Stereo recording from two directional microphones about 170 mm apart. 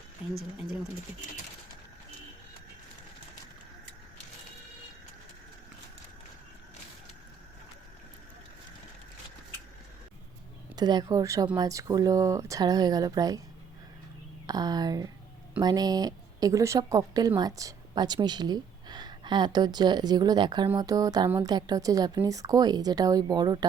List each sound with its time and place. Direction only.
0.2 s speech: 10° right (ahead or behind)
10.8 s speech: 25° right (ahead or behind)
14.4 s speech: 20° right (ahead or behind)